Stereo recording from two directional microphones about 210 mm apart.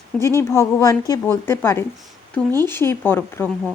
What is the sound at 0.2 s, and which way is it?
Speech, 15° left (ahead or behind).